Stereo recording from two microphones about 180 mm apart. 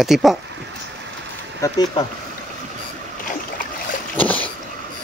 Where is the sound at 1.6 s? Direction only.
25° left (ahead or behind).